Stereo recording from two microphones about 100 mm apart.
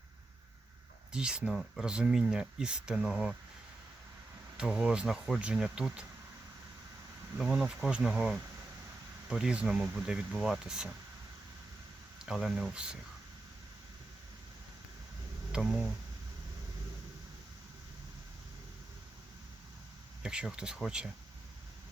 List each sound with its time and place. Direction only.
1.1 s speech: 10° right (ahead or behind)
4.5 s speech: 10° right (ahead or behind)
7.3 s speech: 5° right (ahead or behind)
12.2 s speech: 5° right (ahead or behind)
20.2 s speech: 10° right (ahead or behind)